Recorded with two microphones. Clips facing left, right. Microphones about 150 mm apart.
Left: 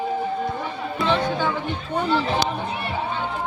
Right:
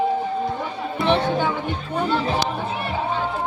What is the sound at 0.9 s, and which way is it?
Music, 20° right (ahead or behind).